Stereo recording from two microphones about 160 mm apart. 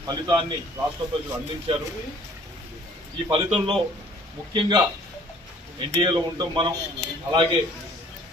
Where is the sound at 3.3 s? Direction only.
35° right (ahead or behind).